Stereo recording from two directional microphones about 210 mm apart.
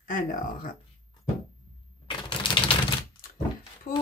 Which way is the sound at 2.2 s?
20° left (ahead or behind).